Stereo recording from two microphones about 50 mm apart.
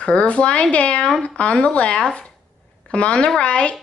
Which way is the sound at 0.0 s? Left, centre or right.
Left.